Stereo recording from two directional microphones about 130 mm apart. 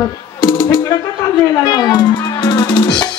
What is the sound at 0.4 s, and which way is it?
Music, 30° left (ahead or behind).